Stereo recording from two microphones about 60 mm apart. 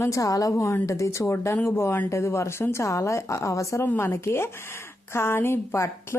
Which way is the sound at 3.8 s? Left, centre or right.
Left.